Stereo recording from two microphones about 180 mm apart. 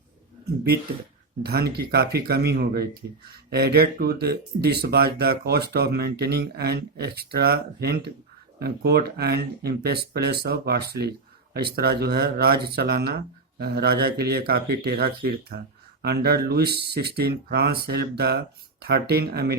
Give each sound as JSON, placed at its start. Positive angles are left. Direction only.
{"t": 1.4, "sound": "speech", "side_deg": -65}